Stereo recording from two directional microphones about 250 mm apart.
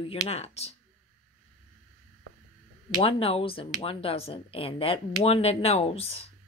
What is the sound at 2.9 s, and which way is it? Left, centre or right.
Speech, left.